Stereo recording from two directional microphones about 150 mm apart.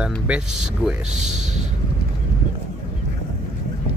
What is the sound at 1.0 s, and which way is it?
Speech, 50° right (ahead or behind).